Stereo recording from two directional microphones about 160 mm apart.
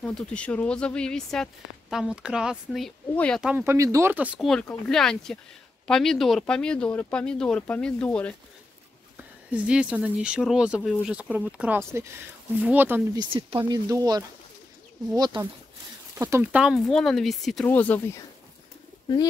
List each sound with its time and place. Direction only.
0.0 s speech: 5° left (ahead or behind)
3.4 s speech: 15° right (ahead or behind)
4.8 s speech: 5° left (ahead or behind)
9.1 s speech: 10° right (ahead or behind)
13.1 s speech: 30° right (ahead or behind)
16.2 s speech: 15° right (ahead or behind)
16.6 s speech: centre (ahead or behind)
17.6 s speech: 10° left (ahead or behind)